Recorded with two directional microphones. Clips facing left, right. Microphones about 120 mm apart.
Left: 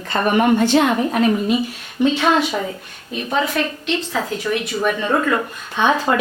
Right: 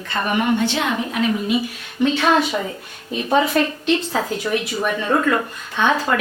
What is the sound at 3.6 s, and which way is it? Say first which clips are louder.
Speech: right 3 dB; 40° right (ahead or behind).